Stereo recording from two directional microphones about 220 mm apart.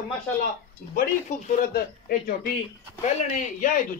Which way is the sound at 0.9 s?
40° left (ahead or behind).